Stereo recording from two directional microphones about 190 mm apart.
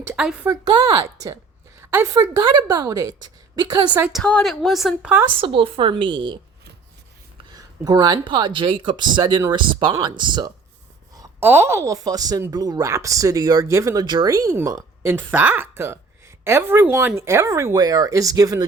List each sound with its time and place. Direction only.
0.1 s a woman's voice: 5° right (ahead or behind)
0.4 s speech: 20° right (ahead or behind)
4.0 s a woman's voice: centre (ahead or behind)
5.4 s speech: 30° right (ahead or behind)
7.5 s speech: 20° right (ahead or behind)